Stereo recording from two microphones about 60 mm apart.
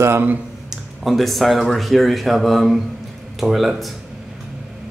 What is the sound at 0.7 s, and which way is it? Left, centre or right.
Speech, centre.